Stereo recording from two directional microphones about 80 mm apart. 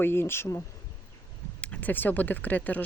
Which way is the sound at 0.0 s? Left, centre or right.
Left.